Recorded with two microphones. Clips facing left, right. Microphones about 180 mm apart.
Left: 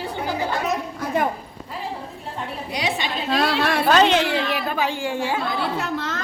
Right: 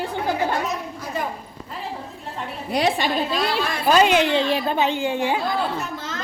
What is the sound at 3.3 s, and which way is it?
Speech, 65° left (ahead or behind).